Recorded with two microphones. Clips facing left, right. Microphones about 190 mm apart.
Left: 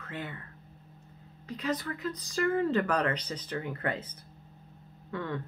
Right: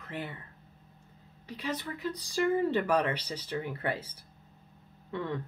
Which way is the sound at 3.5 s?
30° right (ahead or behind).